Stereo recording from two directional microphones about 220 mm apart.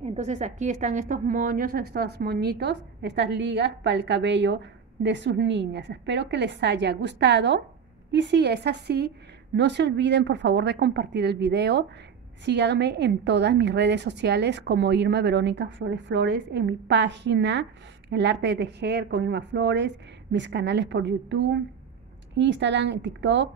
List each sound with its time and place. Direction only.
0.0 s a woman's voice: 30° right (ahead or behind); by 23.5 s 55° right (ahead or behind)